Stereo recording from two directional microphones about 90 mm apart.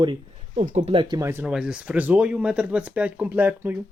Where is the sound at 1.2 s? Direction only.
25° right (ahead or behind).